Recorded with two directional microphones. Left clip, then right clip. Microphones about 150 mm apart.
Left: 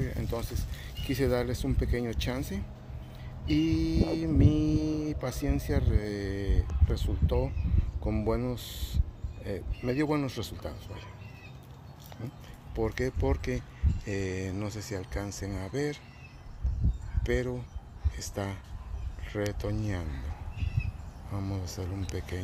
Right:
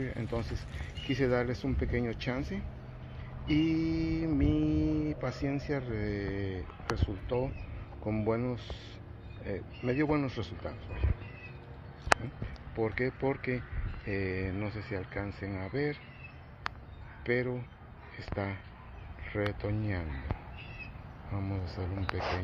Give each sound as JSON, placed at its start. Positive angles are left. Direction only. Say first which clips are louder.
{"t": 0.0, "sound": "a sound", "louder": "left 1 dB", "side_deg": 25}
{"t": 1.0, "sound": "speech", "louder": "left 1 dB", "side_deg": 20}
{"t": 12.7, "sound": "speech", "louder": "left 1 dB", "side_deg": 30}
{"t": 17.2, "sound": "speech", "louder": "even", "side_deg": 25}
{"t": 21.3, "sound": "speech", "louder": "left 1 dB", "side_deg": 30}